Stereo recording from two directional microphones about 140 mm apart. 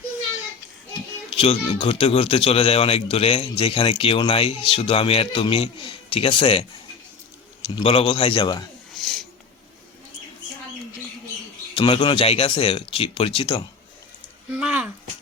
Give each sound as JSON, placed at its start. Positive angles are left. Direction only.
{"t": 1.3, "sound": "speech", "side_deg": 45}
{"t": 9.0, "sound": "wheeze", "side_deg": 0}
{"t": 11.7, "sound": "speech", "side_deg": 40}
{"t": 14.5, "sound": "speech", "side_deg": -10}